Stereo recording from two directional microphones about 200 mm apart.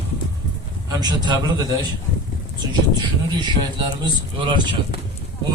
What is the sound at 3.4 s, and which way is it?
Speech, 20° right (ahead or behind).